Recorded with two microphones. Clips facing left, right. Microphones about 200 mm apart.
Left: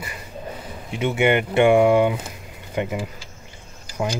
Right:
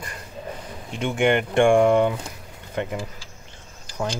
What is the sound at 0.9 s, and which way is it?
Speech, 5° left (ahead or behind).